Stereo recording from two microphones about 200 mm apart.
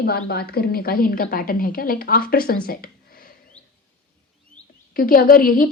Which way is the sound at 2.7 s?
45° left (ahead or behind).